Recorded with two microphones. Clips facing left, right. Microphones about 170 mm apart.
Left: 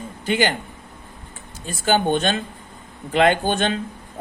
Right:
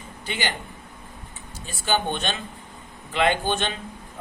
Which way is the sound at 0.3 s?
50° left (ahead or behind).